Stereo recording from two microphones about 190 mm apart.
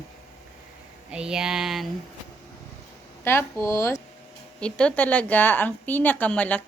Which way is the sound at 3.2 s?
15° left (ahead or behind).